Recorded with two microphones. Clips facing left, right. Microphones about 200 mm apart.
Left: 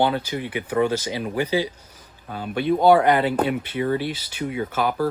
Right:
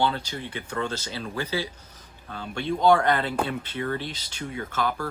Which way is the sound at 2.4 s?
15° left (ahead or behind).